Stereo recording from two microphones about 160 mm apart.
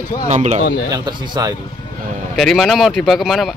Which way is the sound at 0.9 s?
25° right (ahead or behind).